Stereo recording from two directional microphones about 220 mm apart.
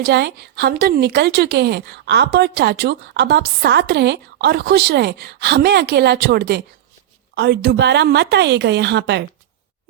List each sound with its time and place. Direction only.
0.0 s a woman's voice: 50° right (ahead or behind)